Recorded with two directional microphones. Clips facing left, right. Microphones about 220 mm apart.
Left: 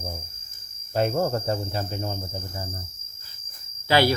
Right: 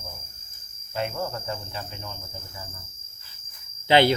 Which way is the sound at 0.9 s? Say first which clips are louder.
Left 7 dB; 40° left (ahead or behind).